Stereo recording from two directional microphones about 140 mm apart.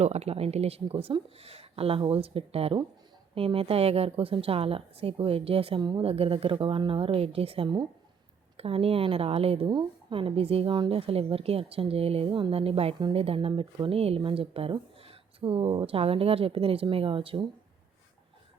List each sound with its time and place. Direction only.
0.0 s a woman's voice: 50° right (ahead or behind)